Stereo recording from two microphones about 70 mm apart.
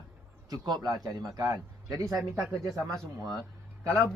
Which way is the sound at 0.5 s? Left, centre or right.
Right.